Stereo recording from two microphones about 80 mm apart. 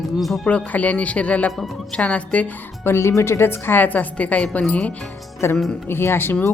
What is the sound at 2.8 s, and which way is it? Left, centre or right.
A woman's voice, left.